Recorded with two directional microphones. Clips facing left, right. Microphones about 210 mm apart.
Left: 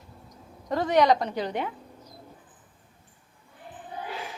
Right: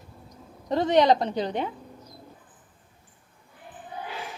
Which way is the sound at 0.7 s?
25° right (ahead or behind).